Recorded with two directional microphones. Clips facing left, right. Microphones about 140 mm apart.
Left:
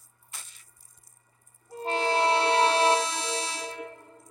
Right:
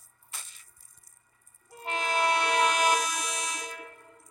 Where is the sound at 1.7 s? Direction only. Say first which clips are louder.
Left 4 dB; 30° left (ahead or behind).